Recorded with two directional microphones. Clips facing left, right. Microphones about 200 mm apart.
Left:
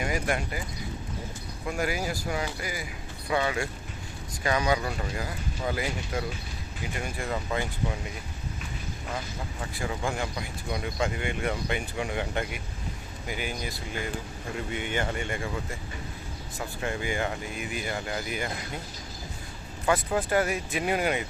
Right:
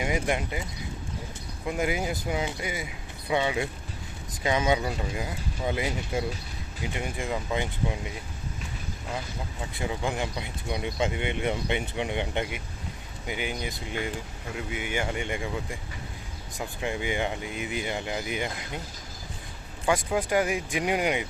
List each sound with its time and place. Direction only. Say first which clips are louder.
0.0 s speech: right 1 dB; 20° right (ahead or behind)
1.6 s speech: right 2 dB; 20° right (ahead or behind)
9.7 s speech: right 1 dB; 20° right (ahead or behind)
14.5 s speech: even; 5° right (ahead or behind)
19.8 s speech: even; 15° right (ahead or behind)